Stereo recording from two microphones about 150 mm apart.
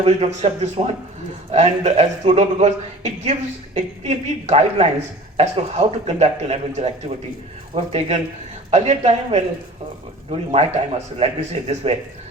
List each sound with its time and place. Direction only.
0.0 s a woman's voice: 45° right (ahead or behind)